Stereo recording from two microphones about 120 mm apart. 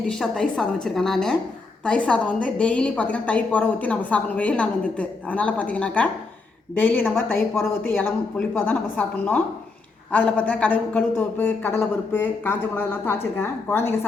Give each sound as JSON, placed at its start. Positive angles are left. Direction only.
{"t": 0.1, "sound": "a woman's voice", "side_deg": 5}